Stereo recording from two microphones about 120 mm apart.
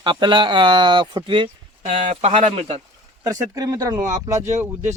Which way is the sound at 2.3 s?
55° right (ahead or behind).